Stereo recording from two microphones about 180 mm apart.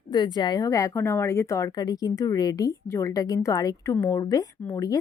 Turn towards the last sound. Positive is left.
turn(degrees=20)  # may be behind; listen again after turning